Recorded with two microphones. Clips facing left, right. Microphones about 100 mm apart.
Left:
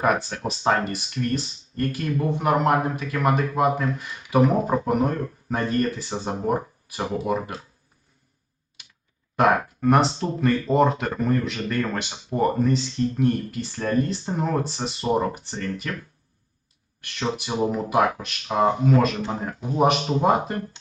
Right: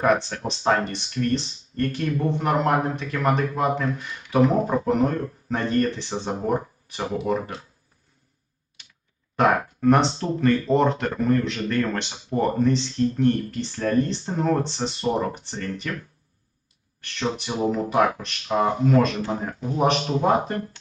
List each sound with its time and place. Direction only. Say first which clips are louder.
0.0 s speech: right 1 dB; 5° left (ahead or behind)
9.3 s speech: left 1 dB; 5° left (ahead or behind)
17.0 s speech: even; 10° left (ahead or behind)